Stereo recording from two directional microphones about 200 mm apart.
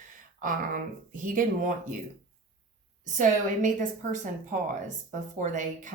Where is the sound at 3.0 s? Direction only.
40° right (ahead or behind).